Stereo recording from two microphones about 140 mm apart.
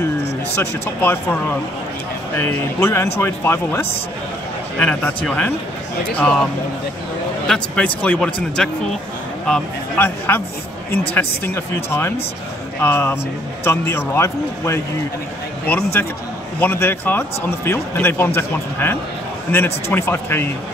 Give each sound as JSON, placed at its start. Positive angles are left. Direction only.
{"t": 0.6, "sound": "speech", "side_deg": 15}
{"t": 7.4, "sound": "speech", "side_deg": 5}